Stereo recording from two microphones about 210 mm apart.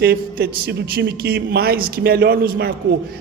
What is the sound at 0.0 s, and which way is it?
A man's voice, 50° right (ahead or behind).